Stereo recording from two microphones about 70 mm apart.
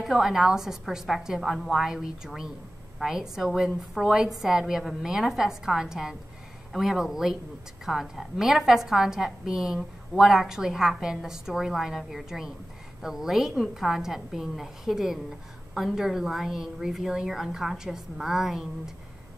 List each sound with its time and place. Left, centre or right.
0.0 s a woman's voice: centre